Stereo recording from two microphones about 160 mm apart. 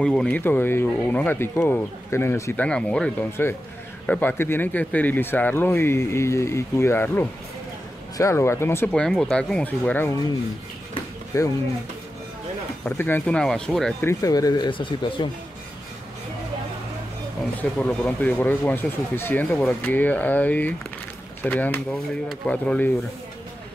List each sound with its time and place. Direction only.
0.0 s speech: 5° left (ahead or behind)
8.8 s speech: 5° left (ahead or behind)
11.3 s speech: 20° left (ahead or behind)
12.8 s speech: 15° left (ahead or behind)
14.0 s speech: 20° left (ahead or behind)
17.6 s speech: 10° left (ahead or behind)